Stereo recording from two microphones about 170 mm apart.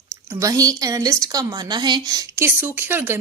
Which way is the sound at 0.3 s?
20° right (ahead or behind).